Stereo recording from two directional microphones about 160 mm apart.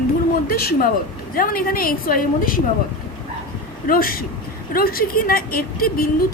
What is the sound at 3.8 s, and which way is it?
A woman's voice, 65° left (ahead or behind).